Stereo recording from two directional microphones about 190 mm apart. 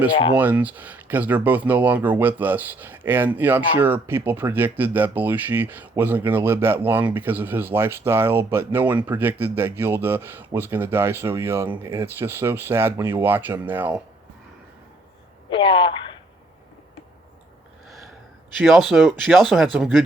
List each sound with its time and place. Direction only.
0.3 s speech: 10° right (ahead or behind)
15.4 s speech: 25° left (ahead or behind)
18.5 s speech: centre (ahead or behind)